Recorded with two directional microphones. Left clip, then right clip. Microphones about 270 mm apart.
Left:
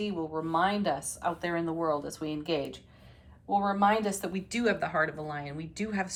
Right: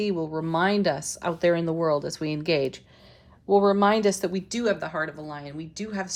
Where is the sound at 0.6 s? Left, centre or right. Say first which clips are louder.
Right 7 dB; right.